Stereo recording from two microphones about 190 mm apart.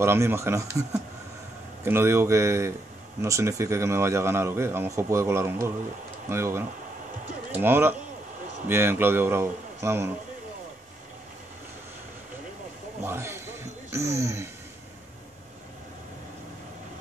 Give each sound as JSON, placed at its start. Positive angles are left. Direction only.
{"t": 0.0, "sound": "a man's voice", "side_deg": -15}
{"t": 1.9, "sound": "a man's voice", "side_deg": -15}
{"t": 13.0, "sound": "a sound", "side_deg": -15}